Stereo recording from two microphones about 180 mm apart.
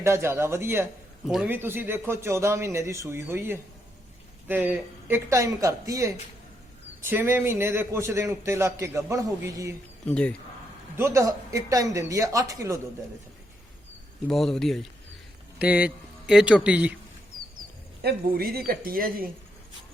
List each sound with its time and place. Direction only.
0.0 s a man's voice: 15° right (ahead or behind)
10.1 s speech: 5° left (ahead or behind)
10.9 s a man's voice: 15° right (ahead or behind)
14.3 s speech: 5° left (ahead or behind)
18.0 s speech: 55° right (ahead or behind)